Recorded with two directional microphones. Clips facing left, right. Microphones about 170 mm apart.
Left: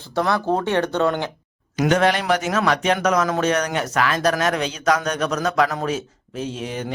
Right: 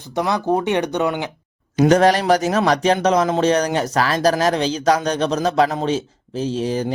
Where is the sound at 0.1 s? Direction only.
15° right (ahead or behind).